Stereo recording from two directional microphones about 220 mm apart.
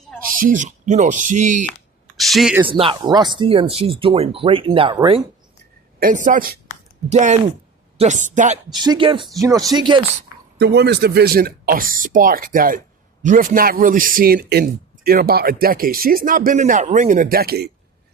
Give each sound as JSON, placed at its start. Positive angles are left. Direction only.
{"t": 0.3, "sound": "a man's voice", "side_deg": -35}
{"t": 2.1, "sound": "speech", "side_deg": 0}
{"t": 2.6, "sound": "speech", "side_deg": -25}
{"t": 6.0, "sound": "a man's voice", "side_deg": -35}
{"t": 8.7, "sound": "speech", "side_deg": -20}
{"t": 10.6, "sound": "a man's voice", "side_deg": -50}